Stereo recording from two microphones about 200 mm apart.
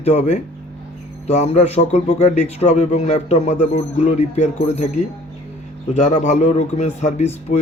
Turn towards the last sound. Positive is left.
turn(degrees=35)  # may be behind; listen again after turning